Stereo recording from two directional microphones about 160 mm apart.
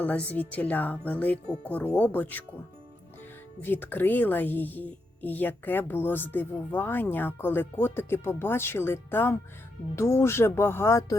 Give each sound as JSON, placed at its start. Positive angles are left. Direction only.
{"t": 0.0, "sound": "speech", "side_deg": 10}
{"t": 3.6, "sound": "speech", "side_deg": 15}